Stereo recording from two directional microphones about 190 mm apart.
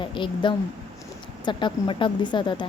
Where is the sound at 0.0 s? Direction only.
25° left (ahead or behind).